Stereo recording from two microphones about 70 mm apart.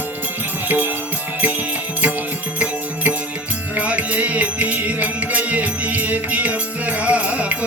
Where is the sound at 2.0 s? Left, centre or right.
Right.